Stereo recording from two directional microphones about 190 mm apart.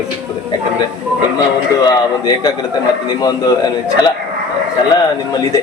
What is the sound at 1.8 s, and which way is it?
A man's voice, 20° left (ahead or behind).